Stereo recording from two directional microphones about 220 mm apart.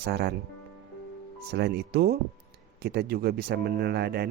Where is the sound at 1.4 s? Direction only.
50° right (ahead or behind).